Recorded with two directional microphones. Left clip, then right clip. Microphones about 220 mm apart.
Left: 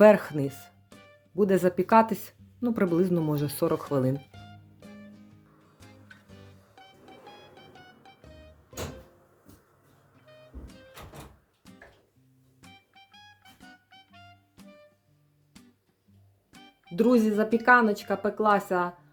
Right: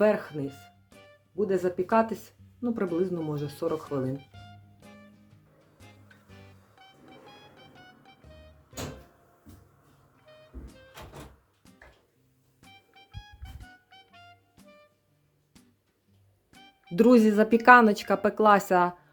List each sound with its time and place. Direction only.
0.0 s speech: 30° left (ahead or behind)
0.9 s music: centre (ahead or behind)
1.4 s speech: 30° left (ahead or behind)
4.1 s music: centre (ahead or behind)
10.2 s music: centre (ahead or behind)
16.9 s speech: 15° right (ahead or behind)